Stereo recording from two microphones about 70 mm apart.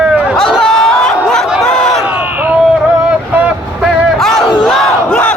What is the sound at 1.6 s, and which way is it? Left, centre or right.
Crowd, centre.